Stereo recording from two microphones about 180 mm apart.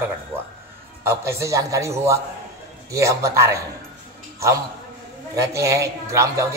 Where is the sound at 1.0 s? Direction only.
15° right (ahead or behind).